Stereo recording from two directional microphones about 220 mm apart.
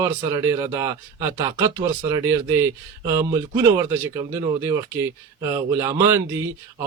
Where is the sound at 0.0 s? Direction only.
15° right (ahead or behind).